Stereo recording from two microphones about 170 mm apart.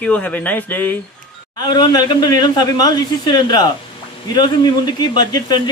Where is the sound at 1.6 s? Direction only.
25° left (ahead or behind).